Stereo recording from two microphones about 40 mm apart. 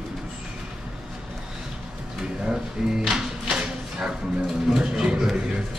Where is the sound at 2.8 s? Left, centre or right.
Centre.